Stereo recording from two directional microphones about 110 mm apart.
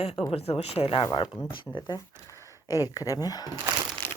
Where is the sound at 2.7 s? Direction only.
35° left (ahead or behind).